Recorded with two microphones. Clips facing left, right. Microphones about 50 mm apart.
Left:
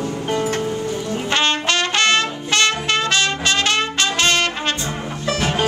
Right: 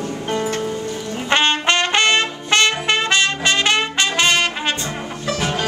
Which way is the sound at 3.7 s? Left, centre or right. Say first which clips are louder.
Right 1 dB; right.